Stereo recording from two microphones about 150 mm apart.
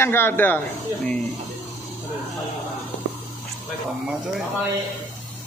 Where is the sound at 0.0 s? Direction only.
15° left (ahead or behind).